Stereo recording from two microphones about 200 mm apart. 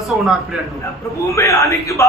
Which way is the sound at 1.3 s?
15° left (ahead or behind).